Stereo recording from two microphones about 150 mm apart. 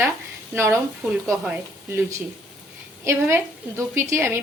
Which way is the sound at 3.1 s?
15° right (ahead or behind).